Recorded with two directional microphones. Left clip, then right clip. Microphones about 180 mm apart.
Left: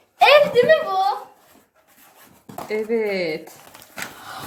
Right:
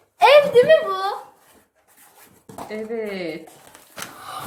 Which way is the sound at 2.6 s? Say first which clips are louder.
Left 6 dB; 30° left (ahead or behind).